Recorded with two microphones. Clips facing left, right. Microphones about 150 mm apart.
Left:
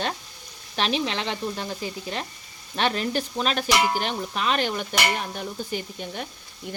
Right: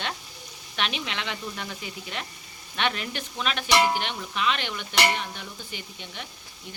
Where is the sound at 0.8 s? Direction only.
35° left (ahead or behind).